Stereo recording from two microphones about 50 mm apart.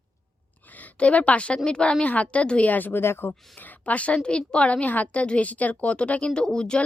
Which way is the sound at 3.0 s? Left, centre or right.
Left.